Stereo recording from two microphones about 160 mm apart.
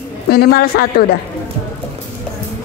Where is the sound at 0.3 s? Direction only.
75° left (ahead or behind).